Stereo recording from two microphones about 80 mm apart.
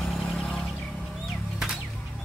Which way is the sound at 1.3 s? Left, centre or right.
Centre.